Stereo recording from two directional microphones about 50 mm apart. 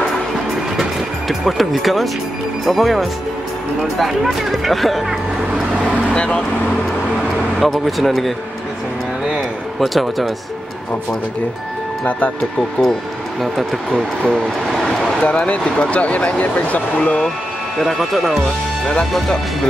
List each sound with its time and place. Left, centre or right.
1.4 s speech: centre
6.1 s speech: centre
7.6 s speech: centre
9.8 s speech: centre
13.9 s speech: centre
14.7 s vehicle: centre
15.2 s speech: left
17.7 s speech: centre